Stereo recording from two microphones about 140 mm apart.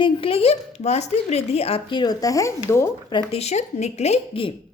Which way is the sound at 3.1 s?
35° left (ahead or behind).